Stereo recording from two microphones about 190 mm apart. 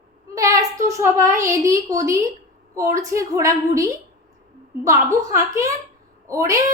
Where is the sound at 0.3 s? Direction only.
15° right (ahead or behind).